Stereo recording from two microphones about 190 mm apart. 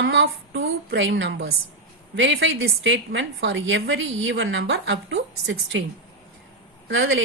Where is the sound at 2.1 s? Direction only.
90° right; by 5.8 s 75° right (ahead or behind).